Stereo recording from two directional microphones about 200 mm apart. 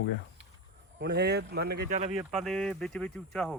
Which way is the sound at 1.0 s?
55° right (ahead or behind).